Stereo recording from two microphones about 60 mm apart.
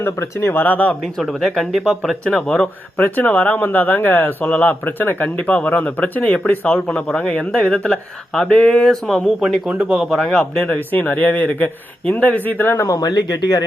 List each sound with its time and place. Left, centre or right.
0.0 s speech: left
1.2 s speech: centre
2.2 s speech: centre
3.0 s speech: left
8.3 s speech: centre
9.4 s speech: centre
10.1 s speech: centre
10.6 s speech: left
12.7 s speech: left
13.0 s speech: left